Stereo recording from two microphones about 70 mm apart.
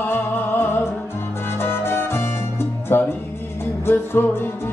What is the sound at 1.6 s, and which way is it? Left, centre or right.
Salsa music, left.